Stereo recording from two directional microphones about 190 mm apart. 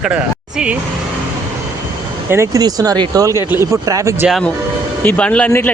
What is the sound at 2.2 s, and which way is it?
Speech, 15° right (ahead or behind).